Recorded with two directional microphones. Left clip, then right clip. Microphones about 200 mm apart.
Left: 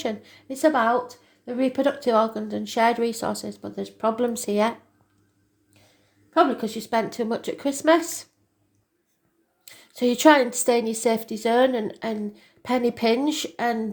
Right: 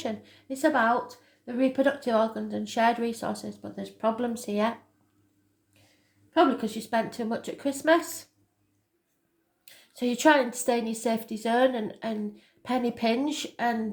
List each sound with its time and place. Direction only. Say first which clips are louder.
0.0 s a woman's voice: left 5 dB; 35° left (ahead or behind)
6.3 s a woman's voice: left 3 dB; 30° left (ahead or behind)
9.6 s a woman's voice: left 7 dB; 35° left (ahead or behind)